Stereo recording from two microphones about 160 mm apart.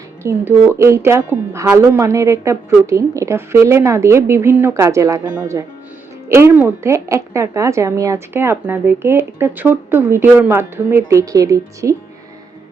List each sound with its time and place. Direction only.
0.2 s speech: 15° right (ahead or behind)